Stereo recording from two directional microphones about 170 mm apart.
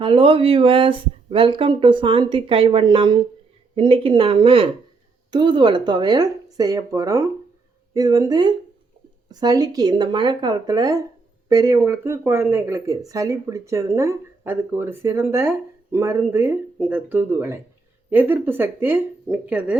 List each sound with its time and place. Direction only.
0.0 s speech: 30° right (ahead or behind); by 19.7 s 10° right (ahead or behind)